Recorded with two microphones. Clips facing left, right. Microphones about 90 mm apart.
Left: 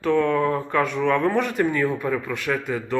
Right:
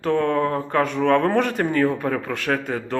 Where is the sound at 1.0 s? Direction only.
60° right (ahead or behind).